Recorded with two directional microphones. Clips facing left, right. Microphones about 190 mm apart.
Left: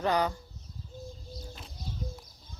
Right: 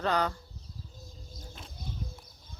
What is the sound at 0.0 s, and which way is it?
Speech, 10° left (ahead or behind).